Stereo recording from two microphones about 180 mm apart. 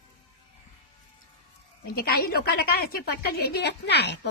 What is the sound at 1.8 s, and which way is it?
A woman's voice, 55° left (ahead or behind).